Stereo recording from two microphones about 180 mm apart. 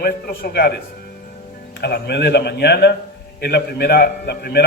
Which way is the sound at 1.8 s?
65° left (ahead or behind).